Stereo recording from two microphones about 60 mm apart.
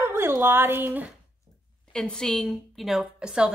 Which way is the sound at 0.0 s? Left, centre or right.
Right.